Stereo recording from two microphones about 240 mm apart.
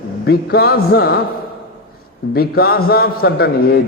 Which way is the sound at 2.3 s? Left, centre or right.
Left.